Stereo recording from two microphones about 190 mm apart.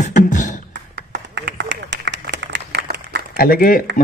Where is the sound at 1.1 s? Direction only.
70° right (ahead or behind).